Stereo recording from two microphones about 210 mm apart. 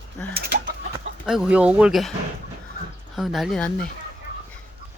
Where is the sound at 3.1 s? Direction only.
Centre (ahead or behind).